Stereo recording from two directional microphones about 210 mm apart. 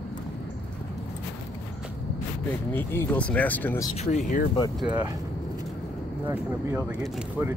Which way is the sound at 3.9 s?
35° left (ahead or behind).